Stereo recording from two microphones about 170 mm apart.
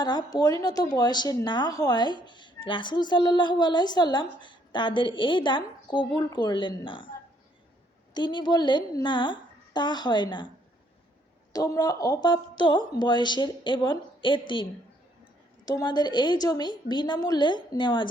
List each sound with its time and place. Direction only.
0.0 s a woman's voice: 25° left (ahead or behind)
8.1 s a woman's voice: 25° left (ahead or behind)
11.5 s a woman's voice: 20° left (ahead or behind)